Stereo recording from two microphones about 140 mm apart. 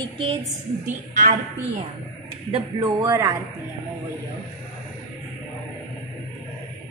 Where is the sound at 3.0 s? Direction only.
25° right (ahead or behind).